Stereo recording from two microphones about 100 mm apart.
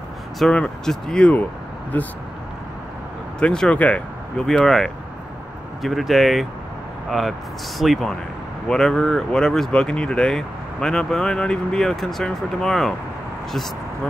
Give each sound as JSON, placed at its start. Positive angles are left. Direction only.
{"t": 0.4, "sound": "speech", "side_deg": 10}
{"t": 3.3, "sound": "speech", "side_deg": 10}